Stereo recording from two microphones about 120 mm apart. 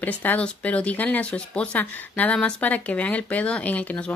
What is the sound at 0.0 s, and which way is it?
Speech, 15° left (ahead or behind).